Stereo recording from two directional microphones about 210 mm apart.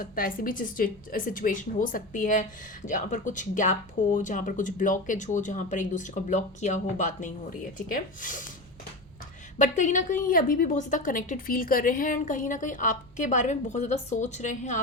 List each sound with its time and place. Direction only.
0.0 s a woman's voice: 40° left (ahead or behind)
9.6 s a woman's voice: 35° left (ahead or behind)